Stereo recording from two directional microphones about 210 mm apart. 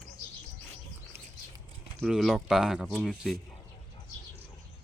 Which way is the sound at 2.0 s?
5° right (ahead or behind).